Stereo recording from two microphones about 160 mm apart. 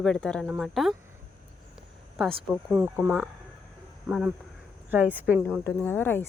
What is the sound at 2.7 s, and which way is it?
A woman's voice, 5° right (ahead or behind).